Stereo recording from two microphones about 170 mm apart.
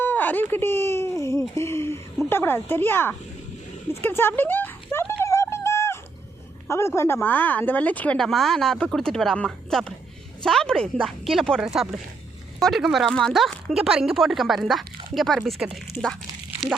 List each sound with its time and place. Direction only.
0.0 s a woman's voice: 10° left (ahead or behind)
5.2 s a sound: 15° left (ahead or behind)
6.7 s a woman's voice: 15° left (ahead or behind); by 16.1 s centre (ahead or behind)